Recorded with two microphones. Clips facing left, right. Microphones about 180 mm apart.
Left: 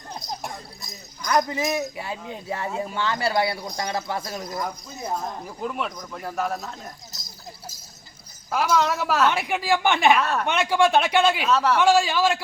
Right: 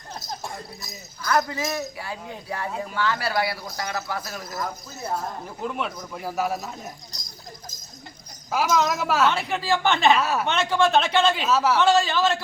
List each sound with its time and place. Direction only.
1.2 s a man's voice: 15° left (ahead or behind)
5.6 s speech: centre (ahead or behind)
8.4 s speech: 10° right (ahead or behind)
9.3 s speech: 15° left (ahead or behind)
10.2 s speech: 5° right (ahead or behind)
10.4 s speech: 10° left (ahead or behind)
11.4 s speech: 5° right (ahead or behind)
11.8 s speech: 10° left (ahead or behind)